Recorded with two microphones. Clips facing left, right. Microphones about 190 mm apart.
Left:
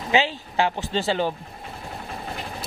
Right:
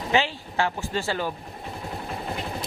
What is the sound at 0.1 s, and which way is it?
Speech, 20° left (ahead or behind).